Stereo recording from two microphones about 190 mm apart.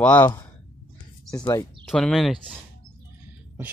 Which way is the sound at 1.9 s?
Centre (ahead or behind).